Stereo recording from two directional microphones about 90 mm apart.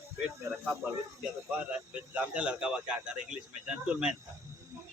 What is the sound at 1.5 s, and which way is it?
Speech, 15° right (ahead or behind).